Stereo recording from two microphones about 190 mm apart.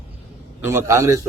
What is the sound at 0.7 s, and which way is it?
Speech, 15° right (ahead or behind).